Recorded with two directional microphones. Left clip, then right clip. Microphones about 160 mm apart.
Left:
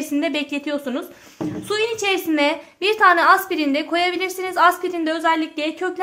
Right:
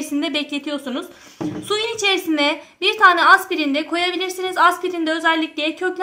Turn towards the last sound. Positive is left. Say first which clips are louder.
# right 2 dB
turn(degrees=40)  # may be behind; listen again after turning